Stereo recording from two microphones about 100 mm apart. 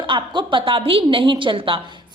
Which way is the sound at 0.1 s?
55° right (ahead or behind).